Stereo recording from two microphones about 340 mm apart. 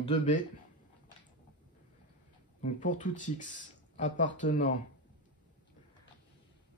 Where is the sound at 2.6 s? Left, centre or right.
Left.